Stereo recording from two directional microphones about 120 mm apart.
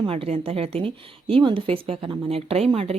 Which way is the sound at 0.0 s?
50° right (ahead or behind).